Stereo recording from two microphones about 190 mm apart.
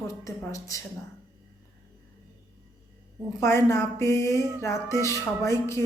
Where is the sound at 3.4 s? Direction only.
15° left (ahead or behind).